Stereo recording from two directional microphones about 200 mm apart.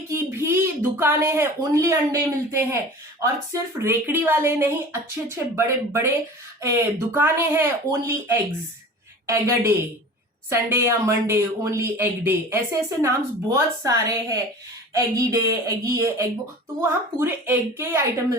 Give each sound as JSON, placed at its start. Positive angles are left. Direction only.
{"t": 0.1, "sound": "speech", "side_deg": -10}